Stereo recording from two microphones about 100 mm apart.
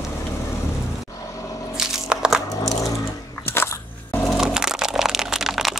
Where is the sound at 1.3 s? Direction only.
35° left (ahead or behind).